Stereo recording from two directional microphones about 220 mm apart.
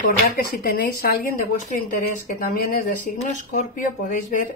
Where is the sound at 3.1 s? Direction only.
35° left (ahead or behind).